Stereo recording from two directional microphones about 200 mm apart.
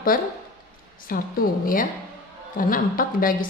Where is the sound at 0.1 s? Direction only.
45° left (ahead or behind).